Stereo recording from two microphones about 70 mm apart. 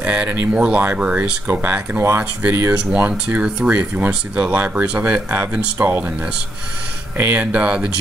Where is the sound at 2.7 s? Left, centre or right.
Centre.